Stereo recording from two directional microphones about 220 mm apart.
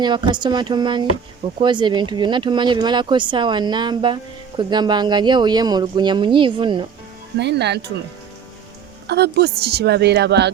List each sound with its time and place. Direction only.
0.0 s speech: 20° right (ahead or behind)
7.3 s a woman's voice: 50° right (ahead or behind)
9.0 s a woman's voice: 50° right (ahead or behind)